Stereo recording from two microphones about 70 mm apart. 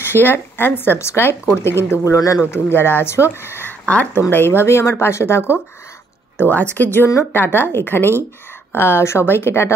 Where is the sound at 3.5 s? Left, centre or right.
Left.